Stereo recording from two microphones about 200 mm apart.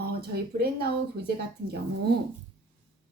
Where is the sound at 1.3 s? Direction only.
55° right (ahead or behind).